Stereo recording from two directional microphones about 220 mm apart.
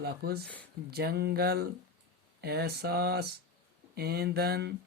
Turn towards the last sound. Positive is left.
turn(degrees=-45)  # may be behind; listen again after turning